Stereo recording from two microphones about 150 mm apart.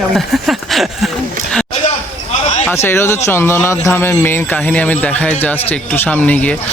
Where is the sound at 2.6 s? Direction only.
15° left (ahead or behind).